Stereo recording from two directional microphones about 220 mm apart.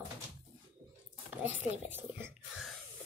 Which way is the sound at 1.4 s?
10° right (ahead or behind).